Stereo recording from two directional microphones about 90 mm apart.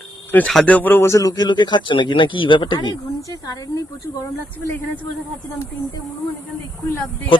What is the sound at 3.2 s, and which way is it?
Speech, 45° left (ahead or behind).